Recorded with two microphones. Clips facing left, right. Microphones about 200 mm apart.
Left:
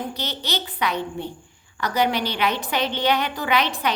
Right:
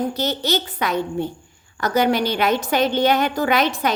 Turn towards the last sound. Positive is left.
turn(degrees=-45)  # may be behind; listen again after turning